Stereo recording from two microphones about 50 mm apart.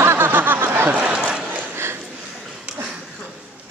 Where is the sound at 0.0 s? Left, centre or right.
Right.